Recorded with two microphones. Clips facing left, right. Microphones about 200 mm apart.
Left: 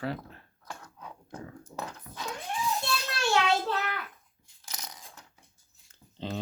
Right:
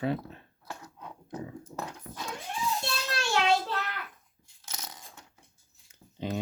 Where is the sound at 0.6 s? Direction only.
5° right (ahead or behind).